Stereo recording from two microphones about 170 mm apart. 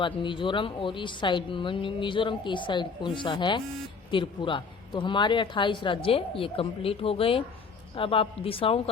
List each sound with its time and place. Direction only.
0.0 s a woman's voice: 30° left (ahead or behind)